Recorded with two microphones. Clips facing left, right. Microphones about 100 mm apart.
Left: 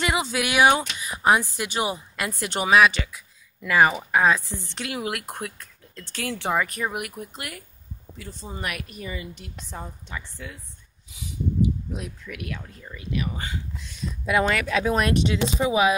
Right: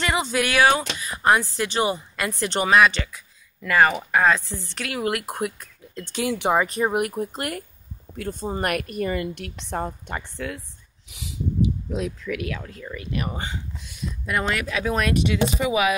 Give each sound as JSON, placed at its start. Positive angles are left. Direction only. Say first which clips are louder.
{"t": 0.0, "sound": "speech", "louder": "right 2 dB", "side_deg": 5}
{"t": 0.5, "sound": "speech", "louder": "left 1 dB", "side_deg": 20}
{"t": 5.0, "sound": "speech", "louder": "right 5 dB", "side_deg": -5}
{"t": 6.9, "sound": "a woman's voice", "louder": "right 8 dB", "side_deg": -40}
{"t": 11.1, "sound": "speech", "louder": "even", "side_deg": -85}
{"t": 13.1, "sound": "speech", "louder": "even", "side_deg": -50}
{"t": 14.2, "sound": "speech", "louder": "left 3 dB", "side_deg": 0}
{"t": 15.6, "sound": "speech", "louder": "left 3 dB", "side_deg": 30}